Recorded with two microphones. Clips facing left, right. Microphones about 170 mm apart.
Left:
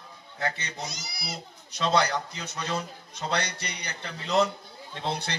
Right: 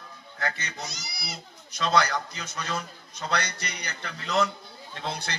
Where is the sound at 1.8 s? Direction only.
25° left (ahead or behind).